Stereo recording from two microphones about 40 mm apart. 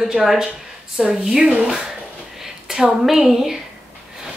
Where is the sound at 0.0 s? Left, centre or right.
Centre.